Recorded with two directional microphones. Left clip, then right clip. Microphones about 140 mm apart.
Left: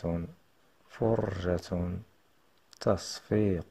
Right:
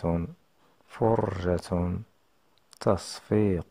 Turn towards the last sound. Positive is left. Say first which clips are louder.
# right 3 dB
turn(degrees=-25)  # may be behind; listen again after turning